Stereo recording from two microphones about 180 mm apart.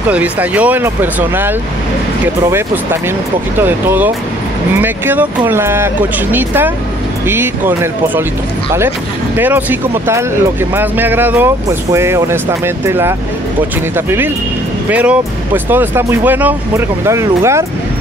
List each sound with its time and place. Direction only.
0.1 s speech: 10° right (ahead or behind)
3.6 s speech: 10° right (ahead or behind)
9.4 s speech: 10° right (ahead or behind)